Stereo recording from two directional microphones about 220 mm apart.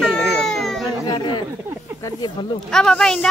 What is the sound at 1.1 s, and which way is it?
Speech, 20° left (ahead or behind).